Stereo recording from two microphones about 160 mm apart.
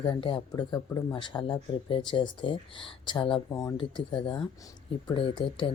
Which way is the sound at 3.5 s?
20° left (ahead or behind).